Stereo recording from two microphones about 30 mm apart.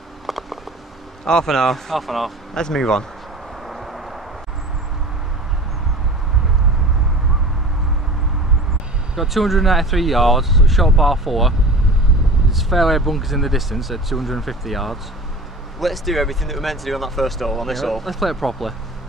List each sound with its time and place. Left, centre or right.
0.3 s a sound: centre
1.2 s speech: centre
2.0 s speech: centre
2.5 s speech: centre
3.7 s vehicle: centre
9.1 s speech: centre